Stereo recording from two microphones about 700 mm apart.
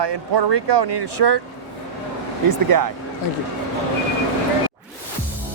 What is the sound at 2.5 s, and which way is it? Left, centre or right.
Speech, right.